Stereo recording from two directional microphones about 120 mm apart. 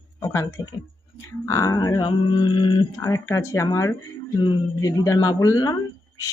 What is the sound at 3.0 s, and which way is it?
A woman's voice, 20° left (ahead or behind).